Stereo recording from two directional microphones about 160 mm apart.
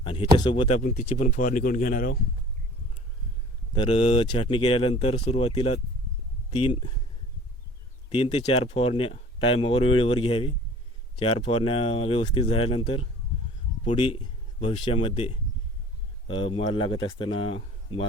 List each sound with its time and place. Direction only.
0.0 s a sound: 30° left (ahead or behind)
0.3 s speech: 30° left (ahead or behind)
0.8 s speech: 55° left (ahead or behind)
1.0 s speech: 40° left (ahead or behind); by 2.1 s 60° left (ahead or behind)
3.8 s speech: 30° left (ahead or behind)
8.1 s speech: 40° left (ahead or behind)